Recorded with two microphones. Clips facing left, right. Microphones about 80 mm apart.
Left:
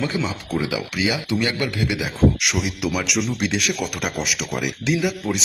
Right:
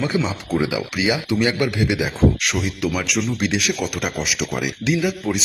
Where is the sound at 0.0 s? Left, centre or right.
Centre.